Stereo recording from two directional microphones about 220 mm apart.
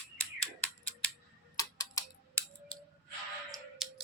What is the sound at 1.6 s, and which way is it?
Tick-tock, 15° left (ahead or behind).